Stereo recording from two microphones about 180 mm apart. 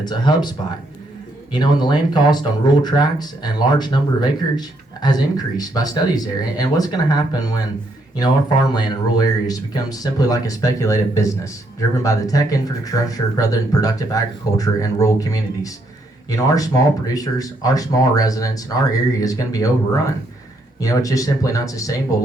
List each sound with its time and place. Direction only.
0.0 s speech: 25° left (ahead or behind)
1.5 s speech: 25° left (ahead or behind)
20.8 s speech: 20° left (ahead or behind)